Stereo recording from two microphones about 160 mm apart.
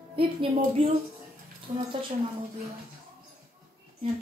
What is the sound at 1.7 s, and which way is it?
Speech, 50° right (ahead or behind).